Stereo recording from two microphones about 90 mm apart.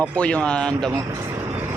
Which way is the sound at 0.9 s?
35° right (ahead or behind).